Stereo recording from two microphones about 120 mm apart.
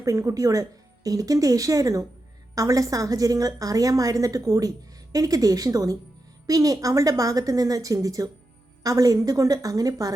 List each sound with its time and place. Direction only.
0.0 s a woman's voice: 30° right (ahead or behind)